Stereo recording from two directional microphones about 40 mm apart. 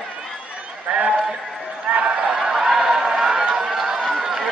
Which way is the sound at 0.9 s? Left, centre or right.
Right.